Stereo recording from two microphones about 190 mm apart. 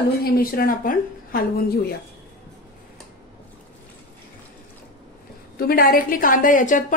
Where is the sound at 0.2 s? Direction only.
50° left (ahead or behind).